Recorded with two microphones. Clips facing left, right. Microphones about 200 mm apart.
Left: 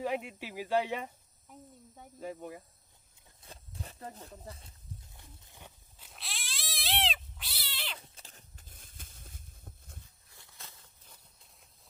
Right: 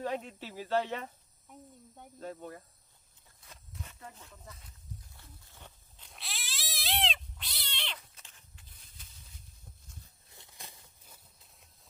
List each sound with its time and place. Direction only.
0.0 s speech: 10° left (ahead or behind)
1.5 s speech: centre (ahead or behind)
3.4 s speech: 30° left (ahead or behind)
5.1 s a sound: 15° left (ahead or behind)
7.9 s cat: 30° left (ahead or behind); by 9.4 s 50° left (ahead or behind)
10.2 s a sound: 20° right (ahead or behind); by 11.7 s 5° right (ahead or behind)